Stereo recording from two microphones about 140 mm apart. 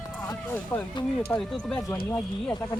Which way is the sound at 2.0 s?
5° left (ahead or behind).